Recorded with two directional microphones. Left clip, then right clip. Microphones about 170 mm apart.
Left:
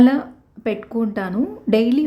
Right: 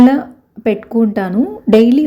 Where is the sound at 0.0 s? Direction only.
20° right (ahead or behind).